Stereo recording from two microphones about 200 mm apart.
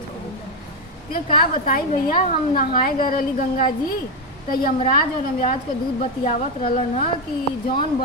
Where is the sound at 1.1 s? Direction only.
45° left (ahead or behind).